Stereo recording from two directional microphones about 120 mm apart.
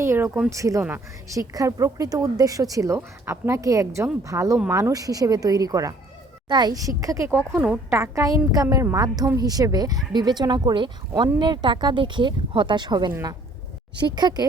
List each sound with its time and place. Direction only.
0.0 s speech: 20° right (ahead or behind)
7.6 s a woman's voice: 10° right (ahead or behind)
7.9 s speech: 25° right (ahead or behind)